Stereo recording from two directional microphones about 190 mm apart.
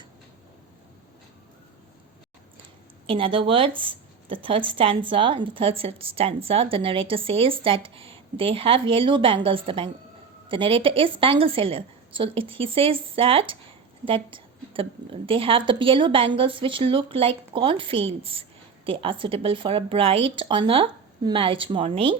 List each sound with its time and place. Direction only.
3.1 s a woman's voice: 30° right (ahead or behind)